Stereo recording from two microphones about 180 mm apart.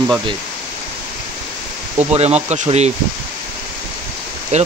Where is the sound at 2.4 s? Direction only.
40° right (ahead or behind).